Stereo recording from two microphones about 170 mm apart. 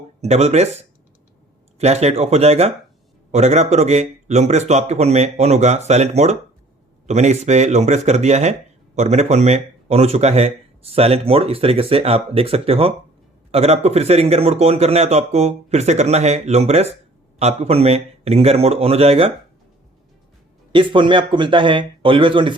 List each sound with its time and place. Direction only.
0.2 s speech: 40° right (ahead or behind)
20.7 s speech: 30° right (ahead or behind)